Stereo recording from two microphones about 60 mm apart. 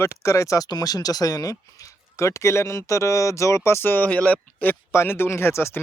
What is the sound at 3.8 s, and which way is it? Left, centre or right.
Speech, left.